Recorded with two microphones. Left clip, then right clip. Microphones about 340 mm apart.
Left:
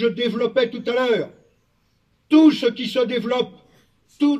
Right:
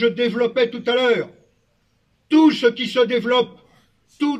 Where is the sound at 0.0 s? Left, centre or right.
Centre.